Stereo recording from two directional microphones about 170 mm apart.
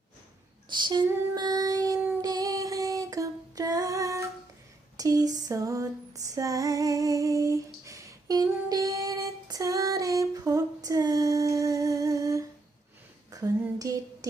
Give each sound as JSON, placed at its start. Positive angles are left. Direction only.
{"t": 0.7, "sound": "female singing", "side_deg": -25}